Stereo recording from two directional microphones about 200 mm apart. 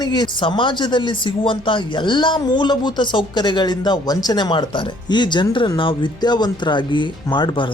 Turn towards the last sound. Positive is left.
turn(degrees=25)  # may be behind; listen again after turning